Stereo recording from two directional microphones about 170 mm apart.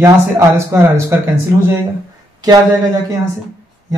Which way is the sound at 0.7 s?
15° right (ahead or behind).